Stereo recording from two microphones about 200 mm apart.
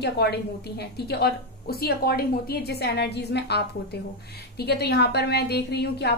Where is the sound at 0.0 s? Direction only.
55° left (ahead or behind).